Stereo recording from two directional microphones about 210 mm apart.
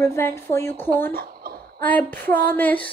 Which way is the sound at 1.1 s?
45° right (ahead or behind).